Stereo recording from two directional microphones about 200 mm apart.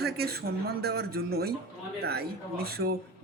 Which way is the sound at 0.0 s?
50° right (ahead or behind).